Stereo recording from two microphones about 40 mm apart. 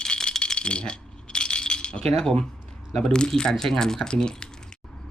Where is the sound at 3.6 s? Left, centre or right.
Centre.